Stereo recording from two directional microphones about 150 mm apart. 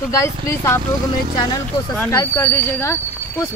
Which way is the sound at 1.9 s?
15° left (ahead or behind).